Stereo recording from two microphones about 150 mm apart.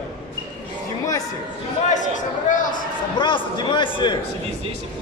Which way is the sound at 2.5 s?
60° left (ahead or behind).